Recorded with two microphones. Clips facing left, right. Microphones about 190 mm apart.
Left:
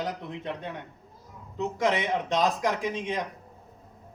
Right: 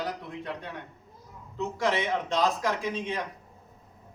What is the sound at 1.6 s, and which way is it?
Speech, 20° left (ahead or behind).